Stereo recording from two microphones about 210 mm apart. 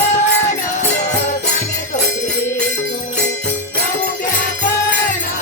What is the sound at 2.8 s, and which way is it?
Music, 55° left (ahead or behind).